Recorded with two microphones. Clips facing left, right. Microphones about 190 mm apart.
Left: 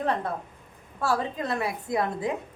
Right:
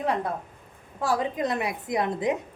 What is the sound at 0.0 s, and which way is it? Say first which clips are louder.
A woman's voice: right 1 dB; 10° right (ahead or behind).